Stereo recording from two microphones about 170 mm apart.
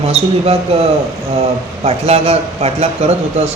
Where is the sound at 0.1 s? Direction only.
35° right (ahead or behind).